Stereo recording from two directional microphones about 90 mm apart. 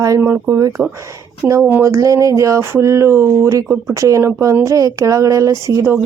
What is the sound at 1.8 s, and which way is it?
Speech, 35° right (ahead or behind).